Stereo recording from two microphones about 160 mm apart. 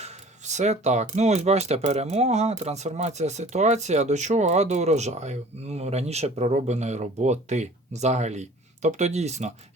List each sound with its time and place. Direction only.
0.0 s speech: 45° right (ahead or behind)